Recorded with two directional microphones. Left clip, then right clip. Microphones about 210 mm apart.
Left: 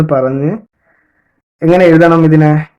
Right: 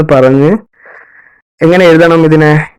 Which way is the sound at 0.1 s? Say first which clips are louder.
Right 10 dB; 40° right (ahead or behind).